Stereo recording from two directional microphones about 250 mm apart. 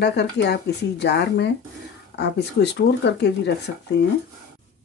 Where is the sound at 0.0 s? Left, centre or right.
Left.